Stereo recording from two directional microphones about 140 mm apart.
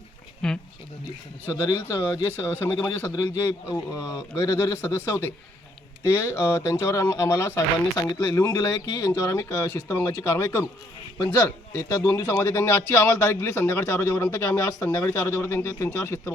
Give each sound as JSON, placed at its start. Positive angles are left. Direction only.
{"t": 0.4, "sound": "speech", "side_deg": 5}
{"t": 1.5, "sound": "speech", "side_deg": 25}